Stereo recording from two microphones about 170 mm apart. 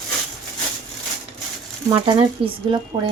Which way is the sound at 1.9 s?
30° right (ahead or behind).